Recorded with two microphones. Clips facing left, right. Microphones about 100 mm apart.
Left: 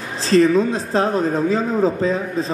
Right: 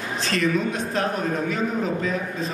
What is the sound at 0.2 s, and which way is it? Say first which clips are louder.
A man's voice: left 9 dB; 30° left (ahead or behind).